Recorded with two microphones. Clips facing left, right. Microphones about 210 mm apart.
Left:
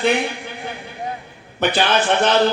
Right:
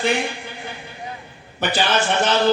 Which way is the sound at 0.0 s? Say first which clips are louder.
Left 3 dB; 60° left (ahead or behind).